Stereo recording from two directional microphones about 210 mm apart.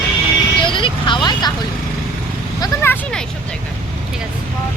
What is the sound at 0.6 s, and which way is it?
Speech, 25° left (ahead or behind).